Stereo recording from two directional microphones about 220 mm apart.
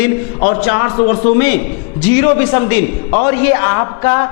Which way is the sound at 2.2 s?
15° left (ahead or behind).